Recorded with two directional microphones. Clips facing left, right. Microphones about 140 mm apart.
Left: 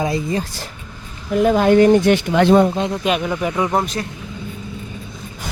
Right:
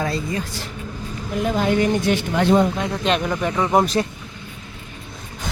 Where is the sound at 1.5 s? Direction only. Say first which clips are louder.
Left 7 dB; 55° left (ahead or behind).